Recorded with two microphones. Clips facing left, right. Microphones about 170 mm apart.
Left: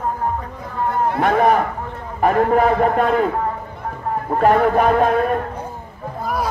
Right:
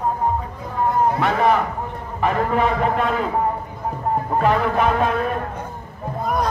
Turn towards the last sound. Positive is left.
turn(degrees=0)  # may be behind; listen again after turning